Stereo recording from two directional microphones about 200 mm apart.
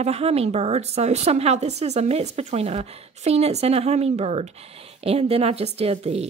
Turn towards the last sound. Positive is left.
turn(degrees=-30)  # may be behind; listen again after turning